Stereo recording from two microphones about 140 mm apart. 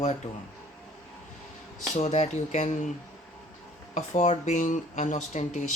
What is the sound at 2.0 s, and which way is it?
Speech, 55° left (ahead or behind).